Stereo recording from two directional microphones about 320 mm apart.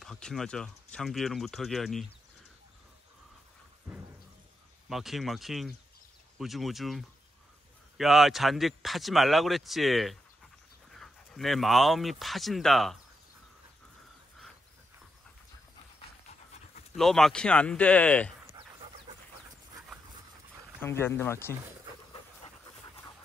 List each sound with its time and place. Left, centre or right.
0.0 s speech: centre
4.8 s speech: centre
16.9 s speech: centre
18.5 s dog: centre
20.8 s speech: centre